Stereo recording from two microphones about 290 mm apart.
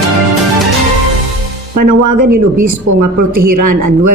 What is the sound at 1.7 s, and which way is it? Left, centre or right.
A man's voice, right.